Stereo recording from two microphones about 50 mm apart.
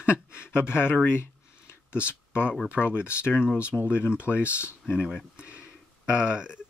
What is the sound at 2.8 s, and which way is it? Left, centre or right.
Speech, left.